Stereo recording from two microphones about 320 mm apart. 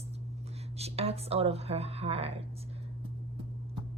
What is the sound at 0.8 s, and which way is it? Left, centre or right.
Speech, centre.